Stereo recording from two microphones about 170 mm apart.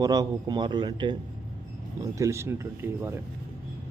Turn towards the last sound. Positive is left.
turn(degrees=-15)  # may be behind; listen again after turning